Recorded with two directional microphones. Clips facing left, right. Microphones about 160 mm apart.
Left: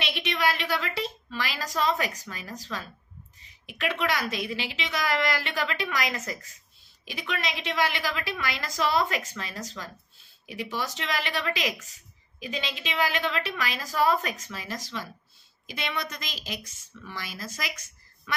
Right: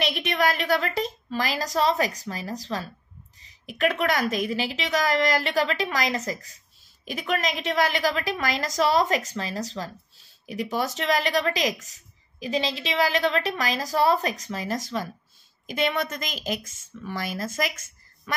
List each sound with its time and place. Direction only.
0.0 s a woman's voice: 45° right (ahead or behind)